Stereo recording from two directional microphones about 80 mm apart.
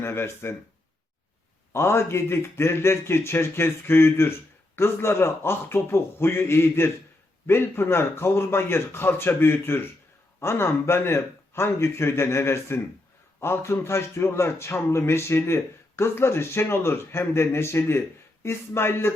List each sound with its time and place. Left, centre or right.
0.0 s a man's voice: left
1.7 s a man's voice: left